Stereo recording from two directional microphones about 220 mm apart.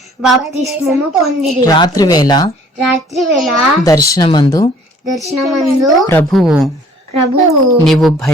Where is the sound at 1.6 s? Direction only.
15° left (ahead or behind).